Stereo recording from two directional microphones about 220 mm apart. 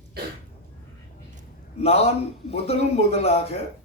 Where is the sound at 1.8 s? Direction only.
30° left (ahead or behind).